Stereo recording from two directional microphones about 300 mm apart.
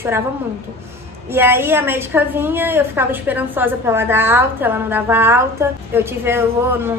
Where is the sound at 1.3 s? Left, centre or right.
Centre.